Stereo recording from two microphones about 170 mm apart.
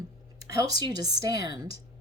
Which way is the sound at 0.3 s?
20° right (ahead or behind).